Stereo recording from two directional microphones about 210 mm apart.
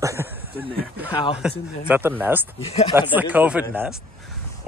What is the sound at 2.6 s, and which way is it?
Speech, 30° left (ahead or behind).